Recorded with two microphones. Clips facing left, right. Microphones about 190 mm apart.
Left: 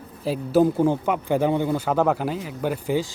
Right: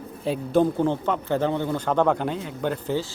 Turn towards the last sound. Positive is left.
turn(degrees=10)  # may be behind; listen again after turning